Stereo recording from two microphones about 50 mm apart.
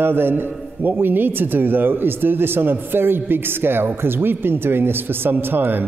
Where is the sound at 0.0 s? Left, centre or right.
Right.